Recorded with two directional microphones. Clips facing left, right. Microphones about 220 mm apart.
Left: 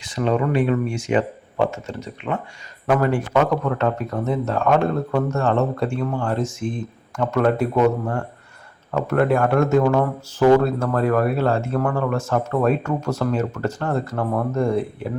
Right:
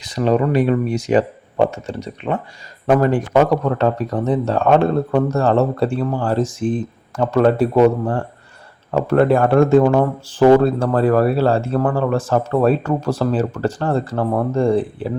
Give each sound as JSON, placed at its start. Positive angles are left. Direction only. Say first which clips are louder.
{"t": 0.0, "sound": "speech", "louder": "right 4 dB", "side_deg": -35}